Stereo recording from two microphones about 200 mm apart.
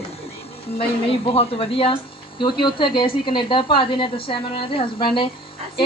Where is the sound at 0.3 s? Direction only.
30° left (ahead or behind).